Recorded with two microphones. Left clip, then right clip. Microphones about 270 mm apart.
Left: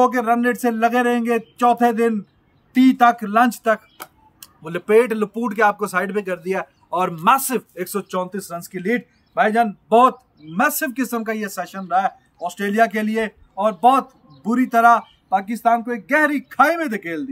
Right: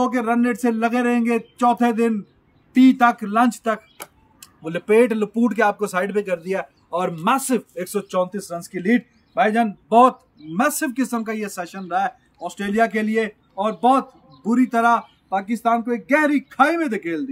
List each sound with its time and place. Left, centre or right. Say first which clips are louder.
0.0 s speech: left 4 dB; centre